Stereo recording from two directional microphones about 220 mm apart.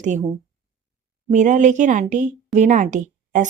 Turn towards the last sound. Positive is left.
turn(degrees=-35)  # may be behind; listen again after turning